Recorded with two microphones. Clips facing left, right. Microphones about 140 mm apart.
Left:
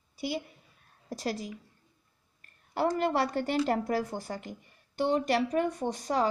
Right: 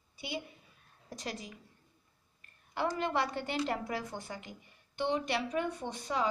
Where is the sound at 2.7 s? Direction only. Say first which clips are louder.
Left 5 dB; 40° left (ahead or behind).